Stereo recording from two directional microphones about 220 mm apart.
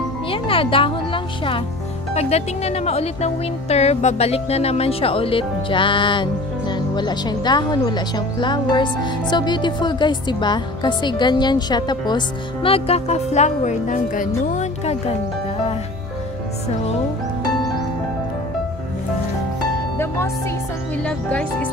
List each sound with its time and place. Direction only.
0.3 s speech: 25° left (ahead or behind)
21.0 s speech: 5° left (ahead or behind)